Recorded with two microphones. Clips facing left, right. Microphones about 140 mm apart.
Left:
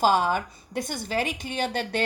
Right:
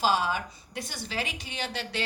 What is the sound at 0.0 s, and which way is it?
A woman's voice, 50° left (ahead or behind).